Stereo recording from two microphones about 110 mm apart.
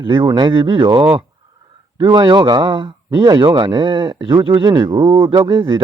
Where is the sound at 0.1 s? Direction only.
45° right (ahead or behind).